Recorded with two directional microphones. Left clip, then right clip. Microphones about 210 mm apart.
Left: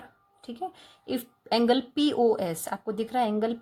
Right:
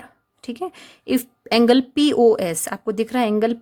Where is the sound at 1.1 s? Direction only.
45° right (ahead or behind).